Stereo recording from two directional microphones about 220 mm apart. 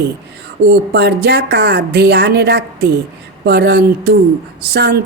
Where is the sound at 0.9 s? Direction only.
45° right (ahead or behind).